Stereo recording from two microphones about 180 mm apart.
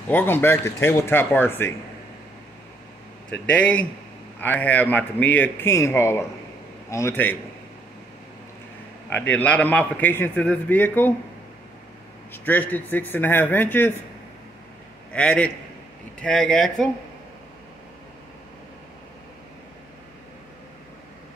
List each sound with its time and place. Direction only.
0.1 s a man's voice: 10° left (ahead or behind)
3.3 s a man's voice: 5° left (ahead or behind)
9.3 s a man's voice: 10° left (ahead or behind)
12.3 s a man's voice: 10° left (ahead or behind)
15.1 s a man's voice: 5° left (ahead or behind)